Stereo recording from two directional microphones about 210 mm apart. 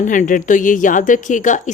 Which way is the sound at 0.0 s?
35° left (ahead or behind).